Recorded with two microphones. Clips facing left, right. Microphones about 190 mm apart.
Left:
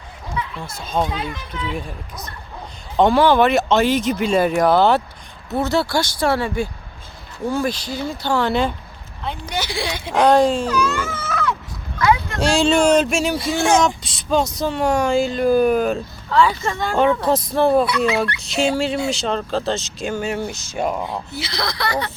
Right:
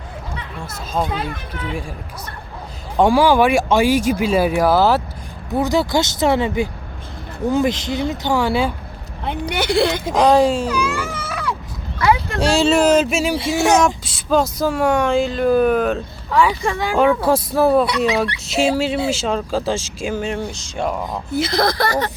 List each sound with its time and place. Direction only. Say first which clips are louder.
1.1 s speech: right 2 dB; 55° right (ahead or behind)
3.0 s speech: right 1 dB; 10° right (ahead or behind)
9.2 s speech: right 5 dB; 60° right (ahead or behind)
10.1 s speech: left 1 dB; centre (ahead or behind)
16.3 s speech: right 1 dB; 15° right (ahead or behind); by 21.2 s 5° left (ahead or behind)
21.3 s speech: right 13 dB; 50° right (ahead or behind)